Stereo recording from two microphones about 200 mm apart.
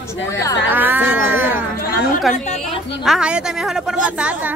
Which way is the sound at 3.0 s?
5° right (ahead or behind).